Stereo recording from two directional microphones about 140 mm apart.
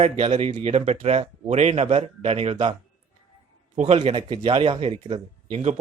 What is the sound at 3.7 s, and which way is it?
A man's voice, 55° right (ahead or behind).